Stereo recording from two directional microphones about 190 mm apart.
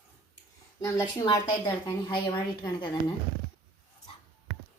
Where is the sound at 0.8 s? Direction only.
20° left (ahead or behind).